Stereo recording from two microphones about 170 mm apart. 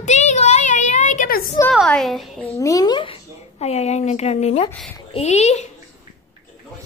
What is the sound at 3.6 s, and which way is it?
Speech, 40° left (ahead or behind).